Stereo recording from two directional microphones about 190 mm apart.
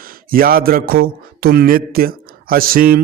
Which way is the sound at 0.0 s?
50° right (ahead or behind).